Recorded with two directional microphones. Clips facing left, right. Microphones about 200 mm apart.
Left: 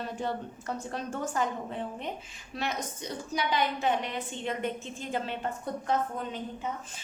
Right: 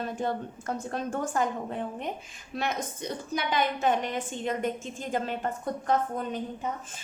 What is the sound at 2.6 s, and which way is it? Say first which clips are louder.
A woman's voice: right 3 dB; 50° right (ahead or behind).